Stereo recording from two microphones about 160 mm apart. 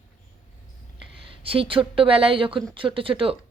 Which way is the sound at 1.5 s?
35° right (ahead or behind).